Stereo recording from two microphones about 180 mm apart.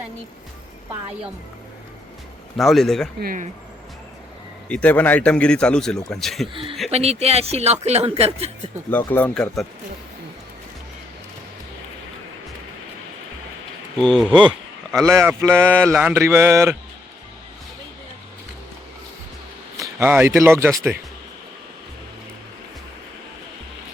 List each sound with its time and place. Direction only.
2.6 s speech: centre (ahead or behind)
3.2 s speech: 55° right (ahead or behind)
4.7 s speech: 10° left (ahead or behind)
6.5 s speech: 30° right (ahead or behind)
9.1 s speech: 5° left (ahead or behind)
13.9 s speech: 5° left (ahead or behind)
15.0 s a sound: 15° right (ahead or behind)
19.7 s speech: 15° right (ahead or behind)